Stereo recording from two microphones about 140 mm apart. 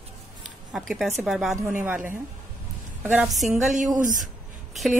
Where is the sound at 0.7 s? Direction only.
Centre (ahead or behind).